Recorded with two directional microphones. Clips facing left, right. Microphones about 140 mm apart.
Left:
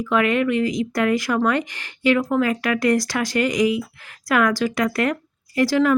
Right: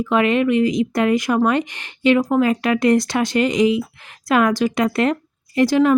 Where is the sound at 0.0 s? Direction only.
20° right (ahead or behind).